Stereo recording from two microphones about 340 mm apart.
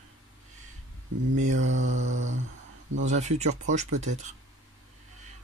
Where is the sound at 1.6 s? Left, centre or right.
Right.